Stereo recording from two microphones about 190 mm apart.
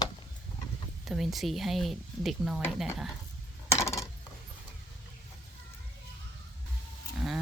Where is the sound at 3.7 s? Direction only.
15° left (ahead or behind).